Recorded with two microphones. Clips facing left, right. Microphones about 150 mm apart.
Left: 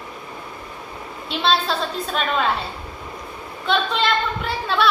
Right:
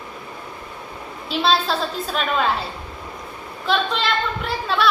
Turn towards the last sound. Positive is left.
turn(degrees=0)  # may be behind; listen again after turning